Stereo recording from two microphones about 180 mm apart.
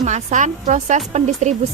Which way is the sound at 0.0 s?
40° right (ahead or behind).